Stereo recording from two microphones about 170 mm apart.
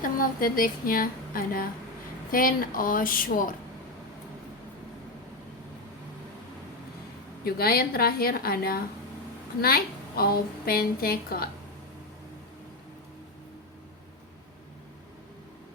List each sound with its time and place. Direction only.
0.0 s a woman's voice: 55° left (ahead or behind)
7.4 s a woman's voice: 65° left (ahead or behind)